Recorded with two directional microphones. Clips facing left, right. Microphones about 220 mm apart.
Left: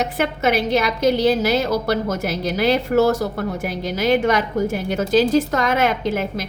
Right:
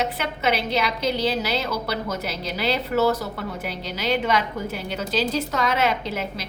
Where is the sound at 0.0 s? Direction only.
50° left (ahead or behind).